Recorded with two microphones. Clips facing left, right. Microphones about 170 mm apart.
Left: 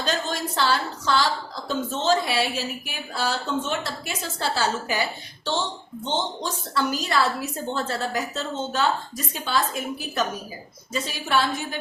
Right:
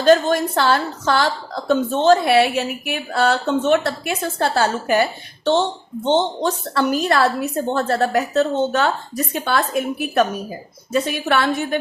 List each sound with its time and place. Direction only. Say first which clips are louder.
0.0 s a woman's voice: right 13 dB; 55° right (ahead or behind)
6.1 s a woman's voice: right 10 dB; 60° right (ahead or behind)